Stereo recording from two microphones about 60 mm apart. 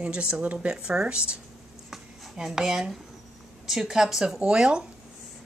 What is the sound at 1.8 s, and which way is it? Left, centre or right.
Writing, centre.